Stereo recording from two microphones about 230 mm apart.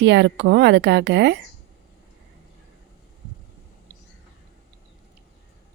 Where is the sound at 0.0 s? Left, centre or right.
Right.